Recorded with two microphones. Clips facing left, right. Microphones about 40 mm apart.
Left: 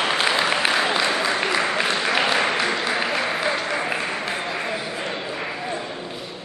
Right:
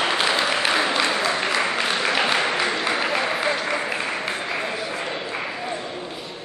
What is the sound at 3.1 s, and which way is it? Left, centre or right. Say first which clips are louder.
Applause: even; centre.